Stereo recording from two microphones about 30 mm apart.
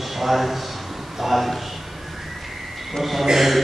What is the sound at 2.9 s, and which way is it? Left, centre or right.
Speech, centre.